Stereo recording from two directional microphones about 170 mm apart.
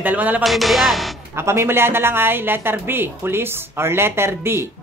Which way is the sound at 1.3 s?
15° right (ahead or behind).